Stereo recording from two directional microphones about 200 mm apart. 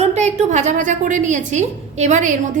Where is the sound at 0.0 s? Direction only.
35° right (ahead or behind).